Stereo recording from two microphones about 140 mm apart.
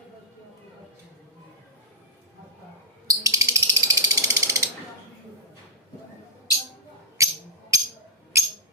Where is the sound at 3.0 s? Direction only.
20° right (ahead or behind).